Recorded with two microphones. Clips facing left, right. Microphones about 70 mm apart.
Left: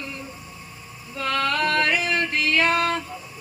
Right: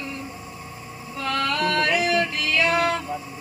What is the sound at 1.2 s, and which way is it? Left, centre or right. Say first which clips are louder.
Yodeling: left 1 dB; left.